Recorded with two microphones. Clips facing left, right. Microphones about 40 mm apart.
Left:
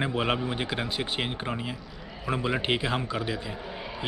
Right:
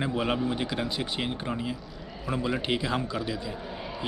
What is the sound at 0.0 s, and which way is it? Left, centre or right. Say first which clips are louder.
A man's voice: even; left.